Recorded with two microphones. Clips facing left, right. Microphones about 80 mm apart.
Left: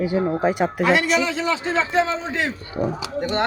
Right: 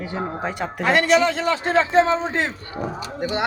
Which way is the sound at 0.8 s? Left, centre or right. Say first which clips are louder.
Right 3 dB; right.